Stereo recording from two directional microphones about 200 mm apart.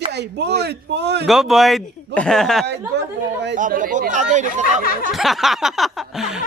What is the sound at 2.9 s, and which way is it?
Speech, 55° right (ahead or behind).